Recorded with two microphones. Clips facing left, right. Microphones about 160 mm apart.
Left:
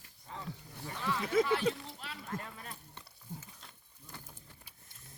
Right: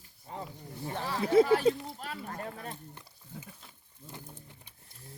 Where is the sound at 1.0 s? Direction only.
35° right (ahead or behind).